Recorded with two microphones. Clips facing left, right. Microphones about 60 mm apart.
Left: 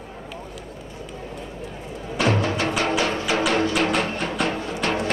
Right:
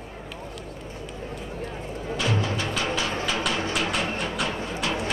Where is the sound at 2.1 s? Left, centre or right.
Left.